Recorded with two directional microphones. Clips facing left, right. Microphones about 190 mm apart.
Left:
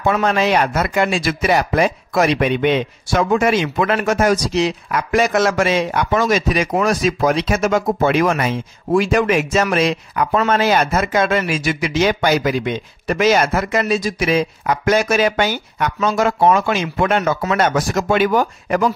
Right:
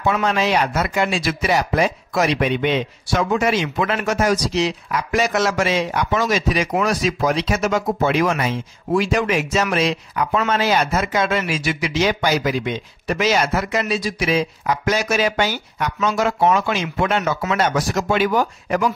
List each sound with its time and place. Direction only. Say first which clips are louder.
0.0 s speech: left 3 dB; 50° left (ahead or behind)